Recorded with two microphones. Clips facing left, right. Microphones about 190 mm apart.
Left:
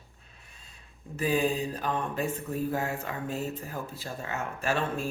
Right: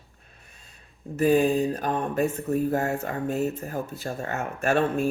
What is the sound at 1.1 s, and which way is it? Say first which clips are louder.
Speech: right 7 dB; 50° right (ahead or behind).